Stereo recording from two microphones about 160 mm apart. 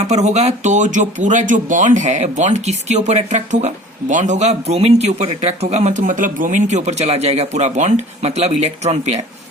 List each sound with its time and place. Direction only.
0.0 s speech: 45° right (ahead or behind)